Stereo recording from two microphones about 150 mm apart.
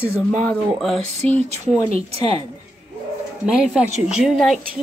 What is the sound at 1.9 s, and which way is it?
Speech, 45° right (ahead or behind).